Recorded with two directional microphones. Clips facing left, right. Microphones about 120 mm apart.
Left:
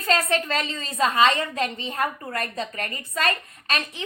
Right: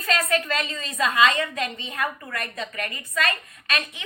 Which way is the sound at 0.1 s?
30° left (ahead or behind).